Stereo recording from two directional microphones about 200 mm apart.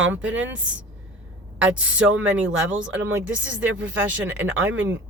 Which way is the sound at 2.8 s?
75° right (ahead or behind).